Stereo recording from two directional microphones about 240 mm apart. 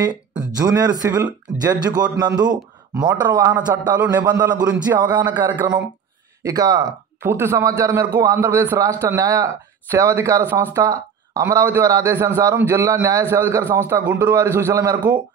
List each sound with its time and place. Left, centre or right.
0.1 s music: centre
0.6 s a man's voice: centre